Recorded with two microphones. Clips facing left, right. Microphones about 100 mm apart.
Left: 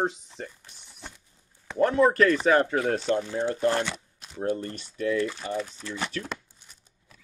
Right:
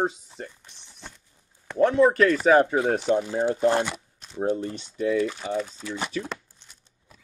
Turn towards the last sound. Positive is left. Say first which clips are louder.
# even
turn(degrees=10)  # may be behind; listen again after turning